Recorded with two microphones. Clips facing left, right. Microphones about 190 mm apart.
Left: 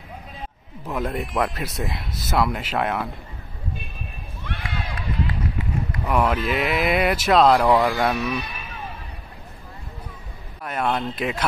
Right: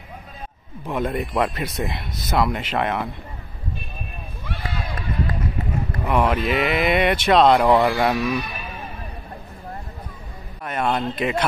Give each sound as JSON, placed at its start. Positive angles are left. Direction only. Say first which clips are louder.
{"t": 0.8, "sound": "speech", "louder": "right 2 dB", "side_deg": 0}
{"t": 4.6, "sound": "run", "louder": "right 2 dB", "side_deg": -40}
{"t": 6.0, "sound": "speech", "louder": "right 1 dB", "side_deg": -10}
{"t": 6.6, "sound": "speech", "louder": "right 1 dB", "side_deg": 5}
{"t": 7.6, "sound": "speech", "louder": "right 2 dB", "side_deg": -10}
{"t": 10.6, "sound": "speech", "louder": "right 1 dB", "side_deg": 0}